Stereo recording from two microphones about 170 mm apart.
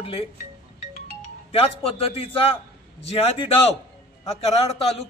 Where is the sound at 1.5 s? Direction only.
35° left (ahead or behind).